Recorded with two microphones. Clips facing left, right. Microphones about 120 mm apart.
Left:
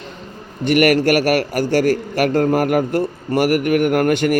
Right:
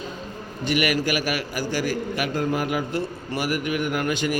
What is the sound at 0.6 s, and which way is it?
A man's voice, 60° left (ahead or behind).